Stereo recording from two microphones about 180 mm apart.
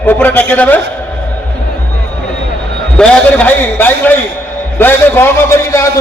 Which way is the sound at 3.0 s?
10° left (ahead or behind).